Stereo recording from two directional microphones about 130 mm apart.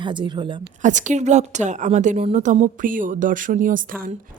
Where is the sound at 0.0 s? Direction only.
40° right (ahead or behind).